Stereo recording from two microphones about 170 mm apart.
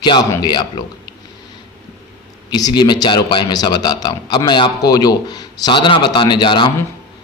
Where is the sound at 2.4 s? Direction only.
25° left (ahead or behind).